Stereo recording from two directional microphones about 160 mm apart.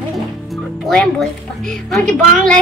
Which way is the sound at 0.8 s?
5° left (ahead or behind).